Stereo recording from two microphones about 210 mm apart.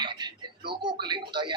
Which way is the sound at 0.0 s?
20° right (ahead or behind).